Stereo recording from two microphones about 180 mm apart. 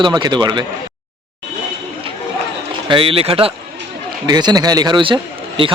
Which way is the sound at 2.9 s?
30° right (ahead or behind).